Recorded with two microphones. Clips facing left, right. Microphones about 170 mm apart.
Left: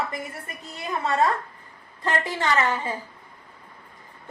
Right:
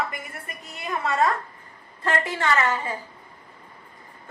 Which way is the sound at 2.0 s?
20° left (ahead or behind).